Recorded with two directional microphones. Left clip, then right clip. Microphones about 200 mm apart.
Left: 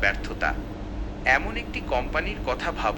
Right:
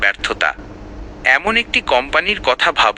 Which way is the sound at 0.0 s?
45° right (ahead or behind).